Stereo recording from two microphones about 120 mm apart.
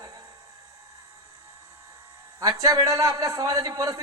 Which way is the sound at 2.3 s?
25° right (ahead or behind).